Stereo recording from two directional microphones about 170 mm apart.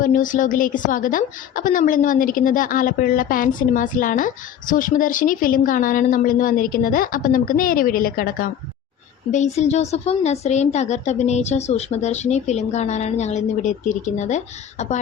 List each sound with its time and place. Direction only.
0.0 s a woman's voice: 50° left (ahead or behind)
9.3 s speech: 45° left (ahead or behind)